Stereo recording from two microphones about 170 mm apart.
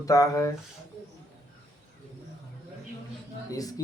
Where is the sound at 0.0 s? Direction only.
20° left (ahead or behind).